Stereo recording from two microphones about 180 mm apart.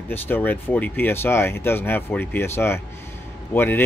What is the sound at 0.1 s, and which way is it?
Speech, 10° left (ahead or behind).